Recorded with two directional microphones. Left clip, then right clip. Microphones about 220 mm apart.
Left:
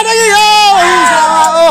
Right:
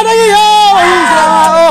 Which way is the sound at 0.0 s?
5° left (ahead or behind).